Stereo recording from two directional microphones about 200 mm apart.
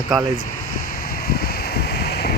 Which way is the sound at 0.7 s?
50° left (ahead or behind).